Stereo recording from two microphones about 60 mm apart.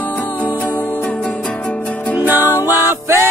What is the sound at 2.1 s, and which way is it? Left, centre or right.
Music, right.